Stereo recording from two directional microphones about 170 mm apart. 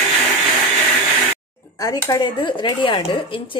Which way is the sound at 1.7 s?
20° left (ahead or behind).